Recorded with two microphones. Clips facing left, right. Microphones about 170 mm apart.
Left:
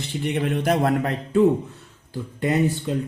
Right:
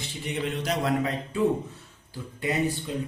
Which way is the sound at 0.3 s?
60° left (ahead or behind).